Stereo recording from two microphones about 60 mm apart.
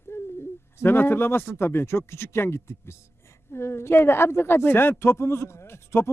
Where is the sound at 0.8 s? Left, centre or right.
Left.